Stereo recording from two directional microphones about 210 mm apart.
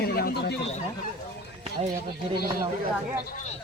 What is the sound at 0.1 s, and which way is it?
Speech, 45° left (ahead or behind).